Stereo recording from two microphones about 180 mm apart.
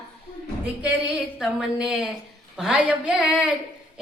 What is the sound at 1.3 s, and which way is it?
A woman's voice, 5° right (ahead or behind).